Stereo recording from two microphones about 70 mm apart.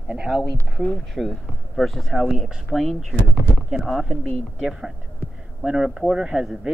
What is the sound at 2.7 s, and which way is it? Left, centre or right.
Speech, centre.